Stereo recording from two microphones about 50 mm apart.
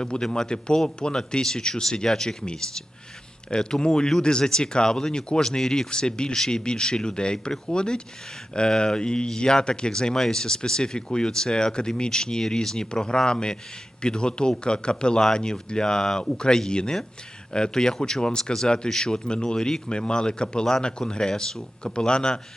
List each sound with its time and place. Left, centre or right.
0.0 s speech: centre